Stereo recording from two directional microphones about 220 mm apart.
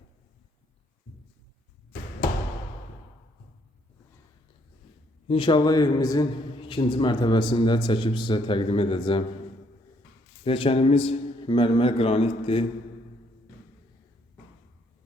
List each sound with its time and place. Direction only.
5.3 s a man's voice: 20° left (ahead or behind)
10.4 s a man's voice: 25° left (ahead or behind)